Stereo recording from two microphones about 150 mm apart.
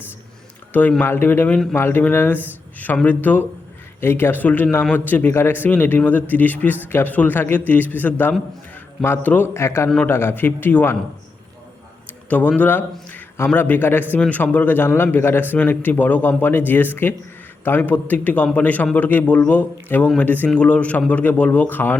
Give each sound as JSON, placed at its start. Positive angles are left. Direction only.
{"t": 0.7, "sound": "a man's voice", "side_deg": 10}
{"t": 12.3, "sound": "a man's voice", "side_deg": 10}